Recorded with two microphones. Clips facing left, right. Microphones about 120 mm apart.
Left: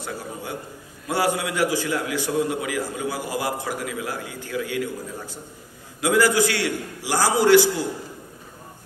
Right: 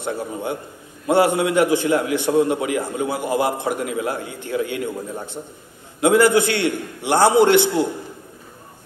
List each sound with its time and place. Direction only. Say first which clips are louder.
1.0 s a man's voice: right 7 dB; 20° right (ahead or behind)